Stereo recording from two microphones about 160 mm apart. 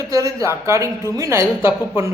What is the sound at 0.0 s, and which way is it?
A woman's voice, 20° right (ahead or behind).